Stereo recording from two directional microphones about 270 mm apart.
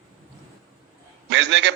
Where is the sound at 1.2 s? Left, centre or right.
Right.